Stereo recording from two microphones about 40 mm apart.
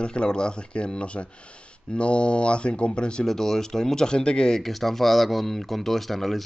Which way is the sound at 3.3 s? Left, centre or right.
Centre.